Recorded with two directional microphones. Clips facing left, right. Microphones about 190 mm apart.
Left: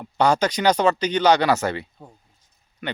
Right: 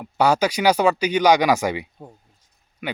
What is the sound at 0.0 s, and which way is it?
Speech, 10° right (ahead or behind).